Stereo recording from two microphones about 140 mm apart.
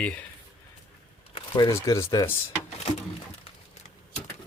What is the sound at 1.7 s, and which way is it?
Speech, 20° left (ahead or behind).